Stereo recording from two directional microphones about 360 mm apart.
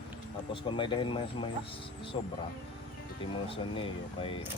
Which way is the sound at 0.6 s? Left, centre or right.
Centre.